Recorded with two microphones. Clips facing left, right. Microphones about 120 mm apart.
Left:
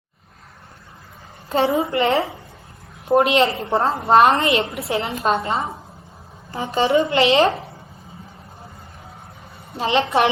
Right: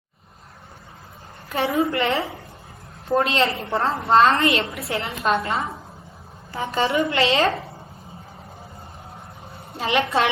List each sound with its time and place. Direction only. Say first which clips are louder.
1.5 s a woman's voice: left 3 dB; 25° left (ahead or behind)
9.7 s a woman's voice: left 3 dB; 25° left (ahead or behind)